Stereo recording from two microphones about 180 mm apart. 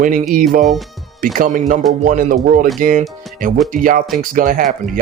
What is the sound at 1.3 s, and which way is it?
Speech, 45° right (ahead or behind).